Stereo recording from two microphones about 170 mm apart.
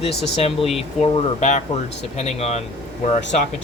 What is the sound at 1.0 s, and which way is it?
Speech, 35° left (ahead or behind).